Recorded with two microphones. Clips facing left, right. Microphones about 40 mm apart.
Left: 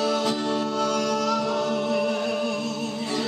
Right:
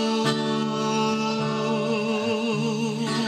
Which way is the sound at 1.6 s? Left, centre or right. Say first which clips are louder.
Even; right.